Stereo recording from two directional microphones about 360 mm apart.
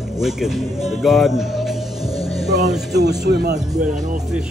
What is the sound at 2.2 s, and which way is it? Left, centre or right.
Music, centre.